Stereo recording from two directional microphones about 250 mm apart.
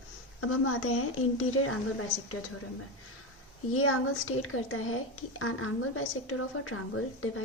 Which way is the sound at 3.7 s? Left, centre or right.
Left.